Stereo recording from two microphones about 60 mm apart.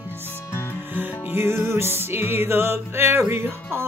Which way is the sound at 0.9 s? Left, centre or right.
Right.